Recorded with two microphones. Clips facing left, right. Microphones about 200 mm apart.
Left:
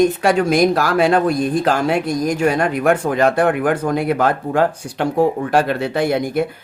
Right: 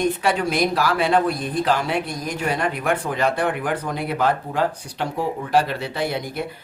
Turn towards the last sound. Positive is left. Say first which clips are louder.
# left 8 dB
turn(degrees=50)  # may be behind; listen again after turning